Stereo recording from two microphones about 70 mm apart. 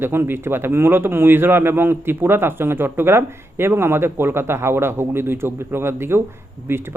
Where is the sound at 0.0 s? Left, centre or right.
Right.